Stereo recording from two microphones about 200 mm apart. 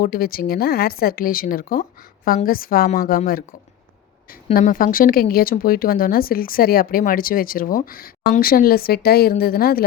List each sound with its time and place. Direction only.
0.0 s speech: 45° left (ahead or behind)
4.5 s speech: 45° left (ahead or behind)